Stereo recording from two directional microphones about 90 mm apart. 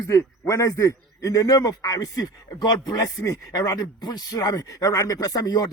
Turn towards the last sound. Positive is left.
turn(degrees=45)  # may be behind; listen again after turning